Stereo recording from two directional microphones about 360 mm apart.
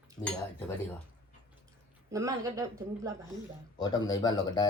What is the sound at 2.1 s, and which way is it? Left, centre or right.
Speech, centre.